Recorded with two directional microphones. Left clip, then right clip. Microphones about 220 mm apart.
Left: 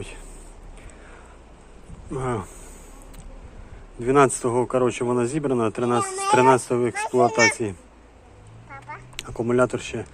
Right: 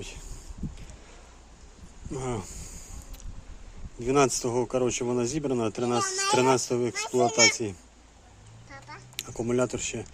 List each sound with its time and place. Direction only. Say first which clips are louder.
2.1 s speech: left 6 dB; 15° right (ahead or behind)
4.0 s speech: left 6 dB; 15° right (ahead or behind)
9.4 s speech: left 6 dB; 15° right (ahead or behind)